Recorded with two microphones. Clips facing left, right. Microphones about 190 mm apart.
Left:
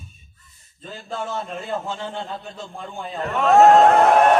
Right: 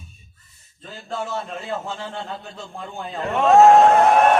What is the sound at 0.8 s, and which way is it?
A man's voice, centre (ahead or behind).